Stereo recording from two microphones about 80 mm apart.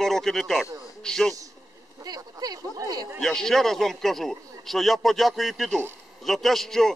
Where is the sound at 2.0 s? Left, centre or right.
Right.